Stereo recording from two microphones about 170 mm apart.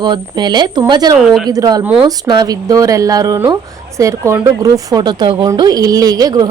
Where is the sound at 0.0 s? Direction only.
25° right (ahead or behind).